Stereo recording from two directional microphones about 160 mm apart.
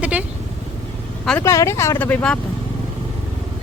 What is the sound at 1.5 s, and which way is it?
Speech, 15° left (ahead or behind).